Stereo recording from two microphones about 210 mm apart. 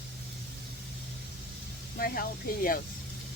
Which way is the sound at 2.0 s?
45° left (ahead or behind).